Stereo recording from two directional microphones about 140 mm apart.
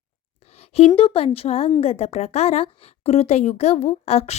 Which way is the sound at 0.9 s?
45° left (ahead or behind).